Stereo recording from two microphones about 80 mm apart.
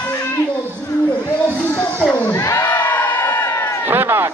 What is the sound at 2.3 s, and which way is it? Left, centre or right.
Crowd, left.